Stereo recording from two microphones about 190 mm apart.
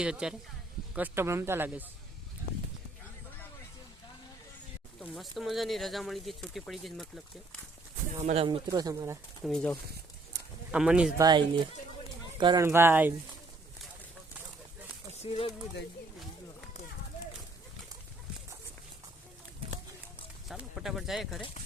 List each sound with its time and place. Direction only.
0.0 s speech: 5° right (ahead or behind)
4.9 s speech: centre (ahead or behind)
8.2 s speech: 35° right (ahead or behind)
8.4 s speech: 25° right (ahead or behind)
9.4 s speech: 5° left (ahead or behind)
10.3 s a sound: 5° right (ahead or behind)
11.2 s speech: 20° right (ahead or behind)
12.6 s speech: 10° right (ahead or behind)
15.2 s speech: 30° left (ahead or behind)
20.5 s speech: centre (ahead or behind)